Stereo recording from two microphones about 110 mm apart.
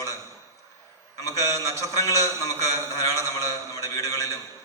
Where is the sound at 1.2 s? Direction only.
30° left (ahead or behind).